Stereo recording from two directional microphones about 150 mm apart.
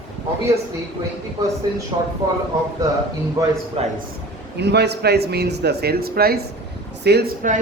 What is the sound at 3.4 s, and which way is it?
Speech, 25° right (ahead or behind).